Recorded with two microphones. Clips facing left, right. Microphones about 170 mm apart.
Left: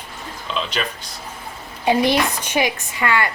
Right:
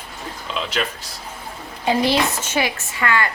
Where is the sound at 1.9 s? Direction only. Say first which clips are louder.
Left 1 dB; 15° left (ahead or behind).